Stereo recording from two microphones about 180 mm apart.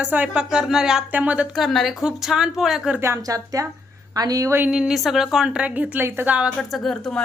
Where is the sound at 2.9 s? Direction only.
15° right (ahead or behind).